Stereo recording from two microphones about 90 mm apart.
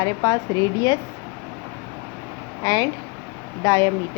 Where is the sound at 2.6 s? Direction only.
45° left (ahead or behind).